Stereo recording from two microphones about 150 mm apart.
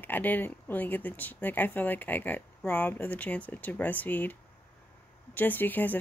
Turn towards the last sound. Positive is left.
turn(degrees=10)  # may be behind; listen again after turning